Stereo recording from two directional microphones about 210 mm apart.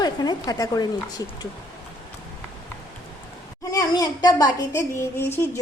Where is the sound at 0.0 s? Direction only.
20° left (ahead or behind).